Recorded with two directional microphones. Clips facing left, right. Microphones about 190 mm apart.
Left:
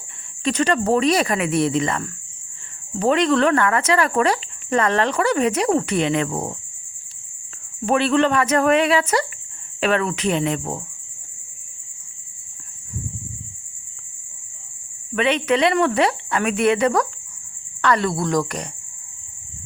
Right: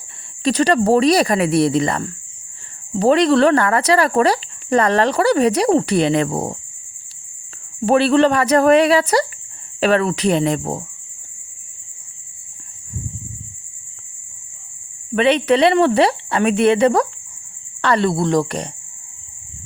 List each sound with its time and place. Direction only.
0.4 s speech: 35° right (ahead or behind)
7.9 s speech: 35° right (ahead or behind)
15.1 s speech: 35° right (ahead or behind)